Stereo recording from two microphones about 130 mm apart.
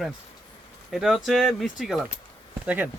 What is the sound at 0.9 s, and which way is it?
Speech, centre (ahead or behind).